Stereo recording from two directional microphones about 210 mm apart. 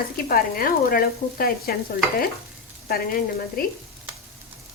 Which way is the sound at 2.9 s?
45° left (ahead or behind).